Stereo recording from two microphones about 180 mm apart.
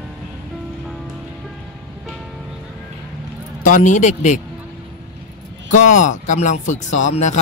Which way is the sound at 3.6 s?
45° left (ahead or behind).